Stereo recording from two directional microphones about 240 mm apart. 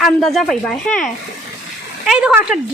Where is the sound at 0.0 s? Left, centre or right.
Centre.